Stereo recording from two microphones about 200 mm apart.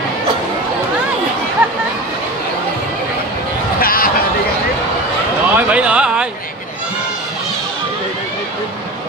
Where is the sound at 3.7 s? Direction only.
45° left (ahead or behind).